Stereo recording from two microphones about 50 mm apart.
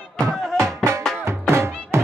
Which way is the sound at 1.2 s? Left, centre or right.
Right.